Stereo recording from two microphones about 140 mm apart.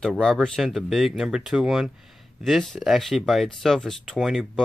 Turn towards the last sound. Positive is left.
turn(degrees=0)  # may be behind; listen again after turning